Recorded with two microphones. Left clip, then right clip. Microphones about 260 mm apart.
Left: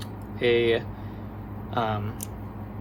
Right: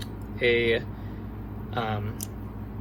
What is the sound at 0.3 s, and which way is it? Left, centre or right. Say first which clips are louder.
Speech: left 1 dB; centre.